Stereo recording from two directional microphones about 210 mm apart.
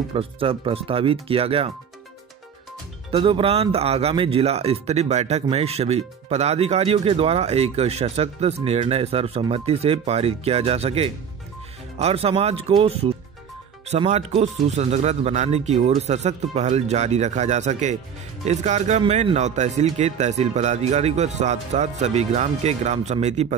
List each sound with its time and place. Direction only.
0.1 s speech: 25° right (ahead or behind)
3.1 s speech: 25° right (ahead or behind)